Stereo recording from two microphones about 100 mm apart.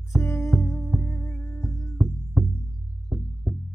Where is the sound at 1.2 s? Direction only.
30° left (ahead or behind).